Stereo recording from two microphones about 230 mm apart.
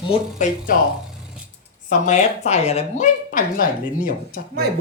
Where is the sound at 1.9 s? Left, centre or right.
Left.